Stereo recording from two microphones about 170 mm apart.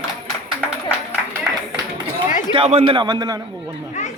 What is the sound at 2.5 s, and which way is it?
Speech, 35° right (ahead or behind).